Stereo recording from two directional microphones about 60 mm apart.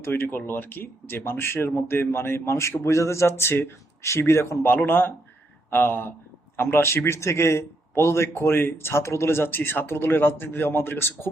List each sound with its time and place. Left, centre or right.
0.0 s speech: left
4.9 s speech: left